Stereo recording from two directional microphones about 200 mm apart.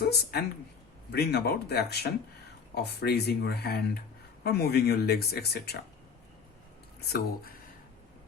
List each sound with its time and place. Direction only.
0.0 s a woman's voice: 50° left (ahead or behind)